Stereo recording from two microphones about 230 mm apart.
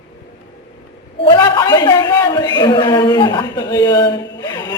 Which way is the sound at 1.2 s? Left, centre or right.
Centre.